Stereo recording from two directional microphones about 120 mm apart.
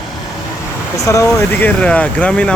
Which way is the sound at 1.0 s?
25° left (ahead or behind).